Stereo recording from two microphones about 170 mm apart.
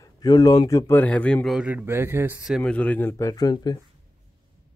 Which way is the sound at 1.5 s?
10° right (ahead or behind).